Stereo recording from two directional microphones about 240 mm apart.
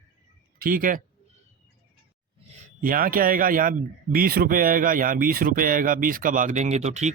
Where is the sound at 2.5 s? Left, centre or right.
Right.